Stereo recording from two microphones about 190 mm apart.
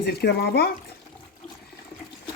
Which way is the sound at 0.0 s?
60° left (ahead or behind).